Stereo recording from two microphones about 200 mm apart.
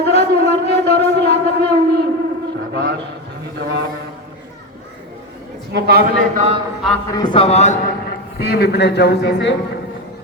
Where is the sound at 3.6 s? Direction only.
60° right (ahead or behind).